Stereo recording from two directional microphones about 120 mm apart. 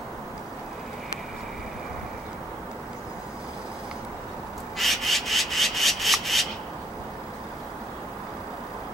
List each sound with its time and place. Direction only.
4.7 s rub: centre (ahead or behind)